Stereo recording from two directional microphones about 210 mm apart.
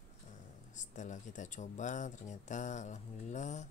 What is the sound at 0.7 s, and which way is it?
Speech, 35° left (ahead or behind).